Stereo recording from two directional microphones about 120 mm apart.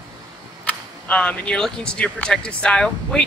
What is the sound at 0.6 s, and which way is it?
Speech, 10° left (ahead or behind).